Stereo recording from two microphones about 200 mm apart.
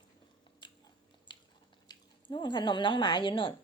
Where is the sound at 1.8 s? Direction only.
20° left (ahead or behind).